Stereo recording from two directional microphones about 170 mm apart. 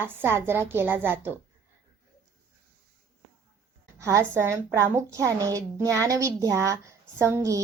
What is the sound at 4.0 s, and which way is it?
A woman's voice, 15° right (ahead or behind).